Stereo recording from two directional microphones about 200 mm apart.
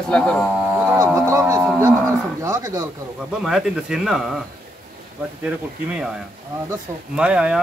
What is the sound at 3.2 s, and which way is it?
Cattle, 5° right (ahead or behind).